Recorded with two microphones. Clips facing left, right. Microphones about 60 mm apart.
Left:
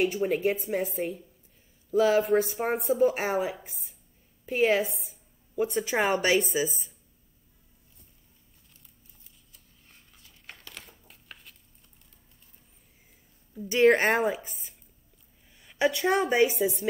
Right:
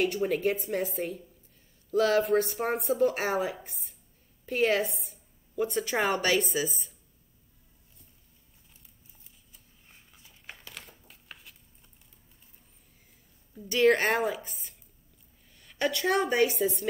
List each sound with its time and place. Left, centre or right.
0.0 s speech: centre
9.5 s crumpling: centre
13.6 s a woman's voice: centre
14.0 s a woman's voice: centre